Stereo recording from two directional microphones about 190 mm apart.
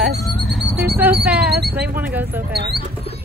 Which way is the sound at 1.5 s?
55° right (ahead or behind).